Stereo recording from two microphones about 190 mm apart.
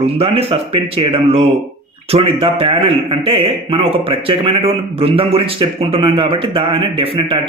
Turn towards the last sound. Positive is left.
turn(degrees=-25)  # may be behind; listen again after turning